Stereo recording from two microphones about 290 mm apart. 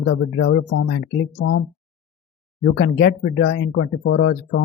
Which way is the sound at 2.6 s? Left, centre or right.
Left.